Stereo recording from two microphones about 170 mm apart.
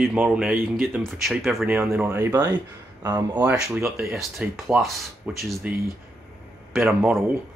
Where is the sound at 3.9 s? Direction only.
Centre (ahead or behind).